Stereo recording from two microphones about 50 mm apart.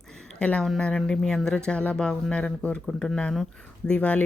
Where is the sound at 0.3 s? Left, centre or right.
Left.